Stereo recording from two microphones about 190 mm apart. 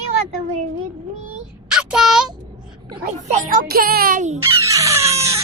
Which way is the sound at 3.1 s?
40° right (ahead or behind).